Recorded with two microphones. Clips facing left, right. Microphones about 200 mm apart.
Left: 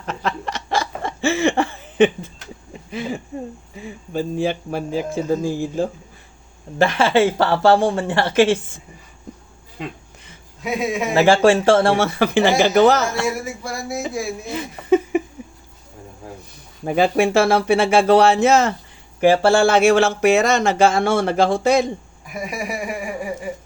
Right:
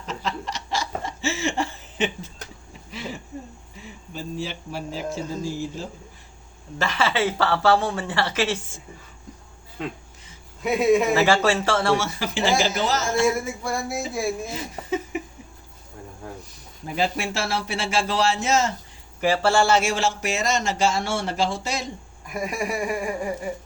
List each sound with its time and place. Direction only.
0.0 s chuckle: 55° left (ahead or behind)
2.9 s a sound: 50° left (ahead or behind)
3.8 s a man's voice: 50° left (ahead or behind)
10.6 s a man's voice: centre (ahead or behind)
11.2 s speech: 55° left (ahead or behind)
13.7 s a man's voice: centre (ahead or behind)
14.4 s a sound: 60° left (ahead or behind)
16.8 s speech: 55° left (ahead or behind)
22.3 s a man's voice: 5° left (ahead or behind)